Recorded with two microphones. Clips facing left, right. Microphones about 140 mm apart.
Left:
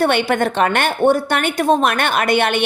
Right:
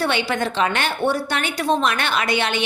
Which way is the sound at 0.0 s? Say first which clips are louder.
Left 6 dB; 55° left (ahead or behind).